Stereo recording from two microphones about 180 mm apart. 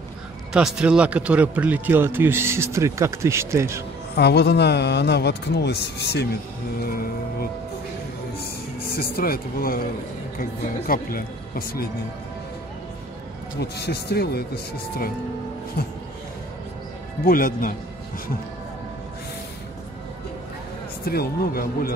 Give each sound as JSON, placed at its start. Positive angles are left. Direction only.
{"t": 0.5, "sound": "a man's voice", "side_deg": -5}
{"t": 4.1, "sound": "a man's voice", "side_deg": 65}
{"t": 6.8, "sound": "speech", "side_deg": 55}
{"t": 8.9, "sound": "speech", "side_deg": 55}
{"t": 13.6, "sound": "speech", "side_deg": 65}
{"t": 17.2, "sound": "speech", "side_deg": 50}
{"t": 21.0, "sound": "speech", "side_deg": 55}